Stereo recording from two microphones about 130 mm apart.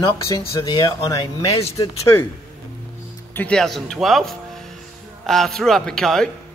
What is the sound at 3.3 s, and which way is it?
Speech, 10° left (ahead or behind).